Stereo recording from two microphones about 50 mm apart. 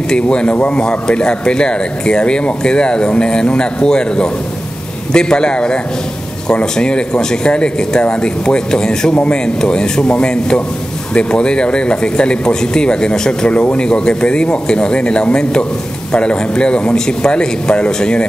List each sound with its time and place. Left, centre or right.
0.1 s speech: centre